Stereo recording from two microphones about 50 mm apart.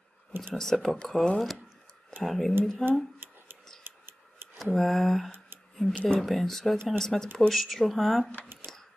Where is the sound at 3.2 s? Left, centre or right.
Right.